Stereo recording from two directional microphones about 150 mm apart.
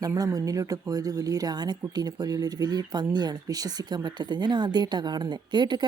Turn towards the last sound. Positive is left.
turn(degrees=-30)  # may be behind; listen again after turning